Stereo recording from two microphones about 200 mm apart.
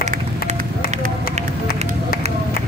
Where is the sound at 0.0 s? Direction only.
35° right (ahead or behind).